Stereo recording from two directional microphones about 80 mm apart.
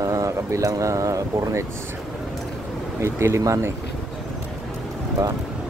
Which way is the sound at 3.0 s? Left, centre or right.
Right.